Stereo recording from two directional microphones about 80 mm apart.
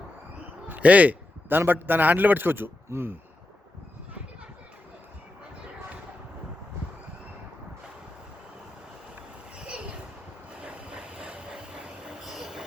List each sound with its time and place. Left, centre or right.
0.7 s a man's voice: centre
9.6 s a sound: centre
10.5 s vehicle: centre